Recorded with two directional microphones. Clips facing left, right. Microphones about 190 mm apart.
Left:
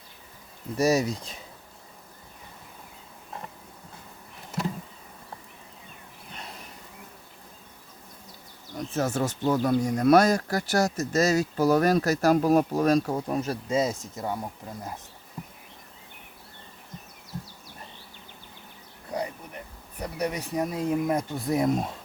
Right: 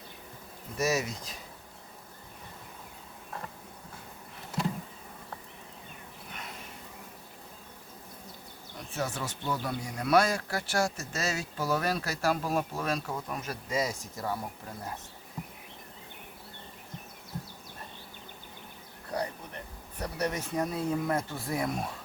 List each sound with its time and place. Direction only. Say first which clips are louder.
0.8 s speech: left 6 dB; 35° left (ahead or behind)
9.0 s speech: left 8 dB; 45° left (ahead or behind); by 14.3 s 20° left (ahead or behind)
19.1 s speech: left 2 dB; 10° left (ahead or behind)